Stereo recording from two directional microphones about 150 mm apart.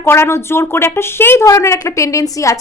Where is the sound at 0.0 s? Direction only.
15° left (ahead or behind).